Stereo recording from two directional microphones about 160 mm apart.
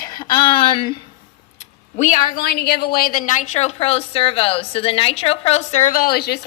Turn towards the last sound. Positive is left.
turn(degrees=85)